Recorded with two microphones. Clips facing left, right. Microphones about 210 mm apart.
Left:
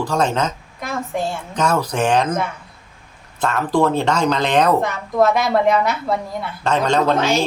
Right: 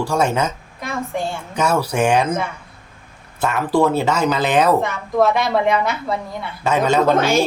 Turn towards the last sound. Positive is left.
turn(degrees=-50)  # may be behind; listen again after turning